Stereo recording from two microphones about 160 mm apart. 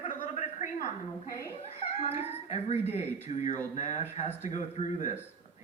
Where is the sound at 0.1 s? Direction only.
50° left (ahead or behind).